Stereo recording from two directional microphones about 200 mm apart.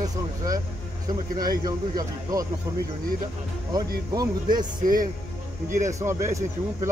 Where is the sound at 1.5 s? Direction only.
20° right (ahead or behind).